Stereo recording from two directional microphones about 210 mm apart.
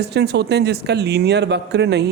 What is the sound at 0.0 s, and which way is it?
Speech, 50° right (ahead or behind).